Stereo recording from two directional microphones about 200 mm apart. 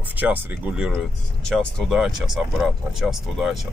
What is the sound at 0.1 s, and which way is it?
Speech, 10° right (ahead or behind).